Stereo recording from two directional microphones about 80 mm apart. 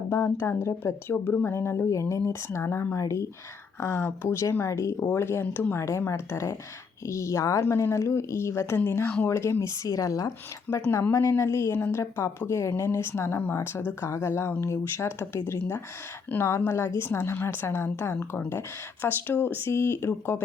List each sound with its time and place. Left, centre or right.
0.1 s speech: left
5.8 s a woman's voice: left